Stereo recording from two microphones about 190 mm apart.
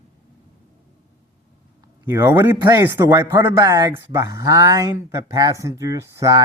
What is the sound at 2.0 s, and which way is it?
Speech, 15° right (ahead or behind).